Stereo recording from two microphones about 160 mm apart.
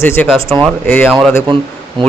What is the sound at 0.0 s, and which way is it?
Speech, 15° left (ahead or behind).